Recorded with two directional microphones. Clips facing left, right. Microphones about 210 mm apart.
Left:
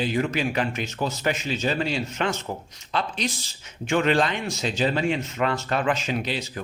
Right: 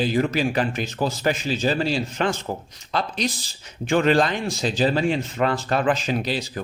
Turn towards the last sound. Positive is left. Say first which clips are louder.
# right 3 dB
turn(degrees=-35)  # may be behind; listen again after turning